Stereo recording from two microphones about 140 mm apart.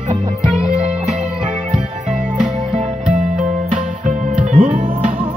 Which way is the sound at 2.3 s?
60° right (ahead or behind).